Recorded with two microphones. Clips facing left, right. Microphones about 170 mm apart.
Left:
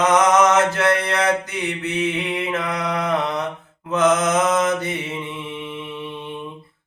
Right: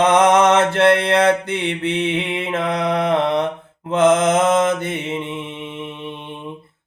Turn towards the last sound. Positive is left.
turn(degrees=-25)  # may be behind; listen again after turning